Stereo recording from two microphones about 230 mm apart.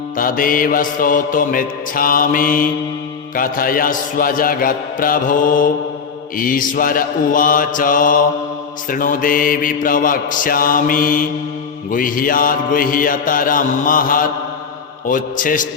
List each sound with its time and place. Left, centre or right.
0.2 s mantra: left